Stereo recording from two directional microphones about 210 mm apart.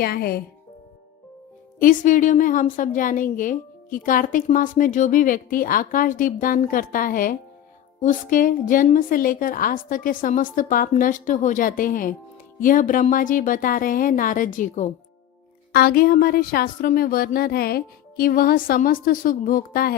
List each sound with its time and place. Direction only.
0.0 s speech: 45° left (ahead or behind)
1.8 s a woman's voice: 40° left (ahead or behind)